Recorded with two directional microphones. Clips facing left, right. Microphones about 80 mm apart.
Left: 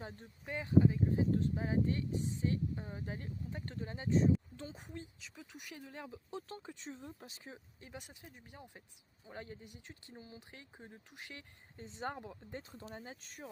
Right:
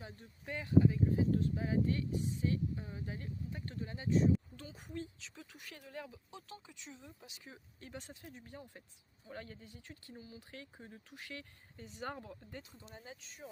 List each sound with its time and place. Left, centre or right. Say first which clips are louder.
0.4 s speech: even; left
7.8 s speech: right 2 dB; centre
13.0 s speech: left 2 dB; left